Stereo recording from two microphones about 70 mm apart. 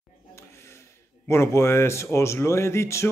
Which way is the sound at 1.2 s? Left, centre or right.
Left.